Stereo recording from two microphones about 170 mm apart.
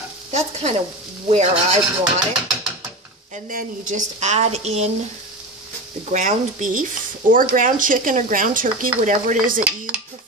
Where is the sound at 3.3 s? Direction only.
50° right (ahead or behind).